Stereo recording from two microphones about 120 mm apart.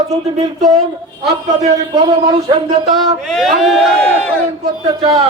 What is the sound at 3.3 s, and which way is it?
Speech, centre (ahead or behind).